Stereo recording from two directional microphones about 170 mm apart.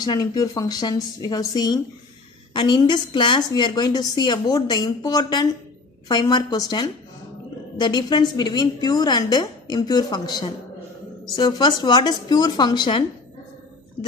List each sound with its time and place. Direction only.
0.0 s a woman's voice: 25° left (ahead or behind)